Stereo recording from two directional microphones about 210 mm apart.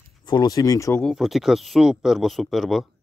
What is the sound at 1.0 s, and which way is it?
Speech, centre (ahead or behind).